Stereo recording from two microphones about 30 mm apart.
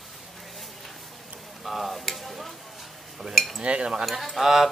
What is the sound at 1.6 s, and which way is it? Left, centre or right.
Stir, centre.